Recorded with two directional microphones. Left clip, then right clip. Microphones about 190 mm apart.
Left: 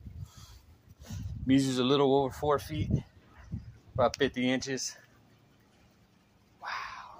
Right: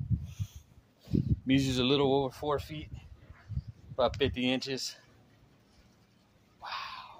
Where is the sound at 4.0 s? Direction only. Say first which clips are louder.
Left 1 dB; 15° left (ahead or behind).